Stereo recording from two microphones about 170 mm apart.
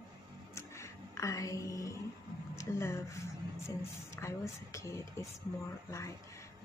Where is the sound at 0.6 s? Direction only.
15° left (ahead or behind).